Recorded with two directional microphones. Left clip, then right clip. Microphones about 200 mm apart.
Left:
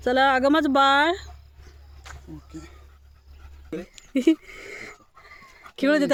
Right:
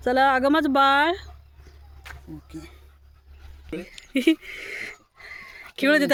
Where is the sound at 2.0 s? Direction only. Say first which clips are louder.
Right 2 dB; 45° right (ahead or behind).